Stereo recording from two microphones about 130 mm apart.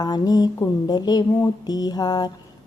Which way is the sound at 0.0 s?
30° left (ahead or behind).